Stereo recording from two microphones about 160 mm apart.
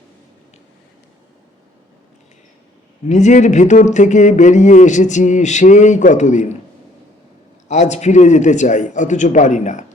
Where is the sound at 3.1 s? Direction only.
45° left (ahead or behind).